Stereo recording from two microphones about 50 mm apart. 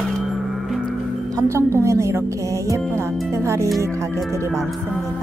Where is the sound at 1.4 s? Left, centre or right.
Right.